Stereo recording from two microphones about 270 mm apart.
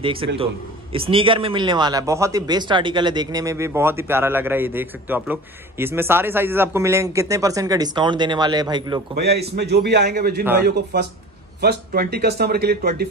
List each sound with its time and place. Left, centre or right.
0.0 s a man's voice: centre
9.3 s speech: right